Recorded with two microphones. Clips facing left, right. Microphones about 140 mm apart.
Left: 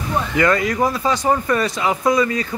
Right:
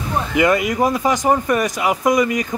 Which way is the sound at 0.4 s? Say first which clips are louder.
Right 2 dB; 15° right (ahead or behind).